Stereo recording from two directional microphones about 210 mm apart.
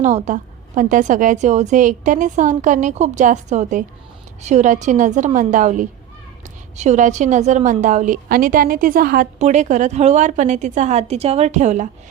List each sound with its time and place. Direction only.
0.0 s a woman's voice: 35° right (ahead or behind)